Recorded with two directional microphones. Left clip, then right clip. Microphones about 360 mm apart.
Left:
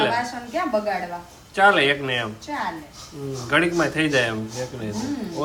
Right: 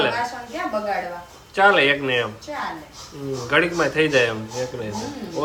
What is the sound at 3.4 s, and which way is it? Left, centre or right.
Speech, centre.